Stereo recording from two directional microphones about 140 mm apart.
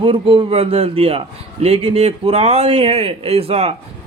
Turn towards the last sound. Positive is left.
turn(degrees=-45)  # may be behind; listen again after turning